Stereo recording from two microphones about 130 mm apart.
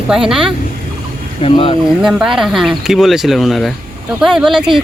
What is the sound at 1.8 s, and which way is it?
Speech, 5° right (ahead or behind).